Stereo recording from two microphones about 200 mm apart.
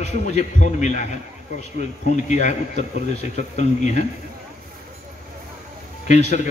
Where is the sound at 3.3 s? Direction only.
35° left (ahead or behind).